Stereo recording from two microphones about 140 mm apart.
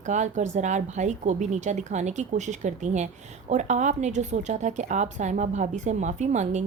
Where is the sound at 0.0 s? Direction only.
60° right (ahead or behind).